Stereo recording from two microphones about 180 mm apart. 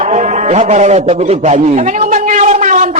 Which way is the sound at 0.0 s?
40° right (ahead or behind).